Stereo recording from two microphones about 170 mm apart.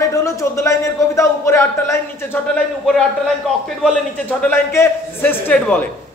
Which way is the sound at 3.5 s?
Centre (ahead or behind).